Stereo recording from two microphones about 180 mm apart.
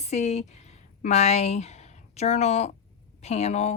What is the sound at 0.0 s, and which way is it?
Speech, 40° left (ahead or behind).